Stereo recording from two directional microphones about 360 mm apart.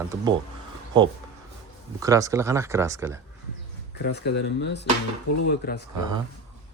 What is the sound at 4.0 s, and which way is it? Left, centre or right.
Speech, left.